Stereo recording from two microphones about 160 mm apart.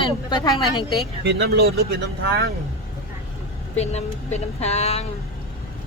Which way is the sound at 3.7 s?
45° left (ahead or behind).